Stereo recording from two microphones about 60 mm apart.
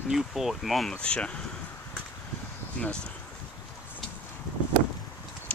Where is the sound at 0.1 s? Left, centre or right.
Centre.